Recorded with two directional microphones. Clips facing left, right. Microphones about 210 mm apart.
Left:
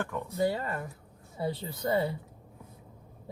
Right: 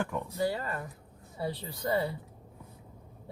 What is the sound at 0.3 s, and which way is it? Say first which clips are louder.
A woman's voice: left 2 dB; 25° left (ahead or behind).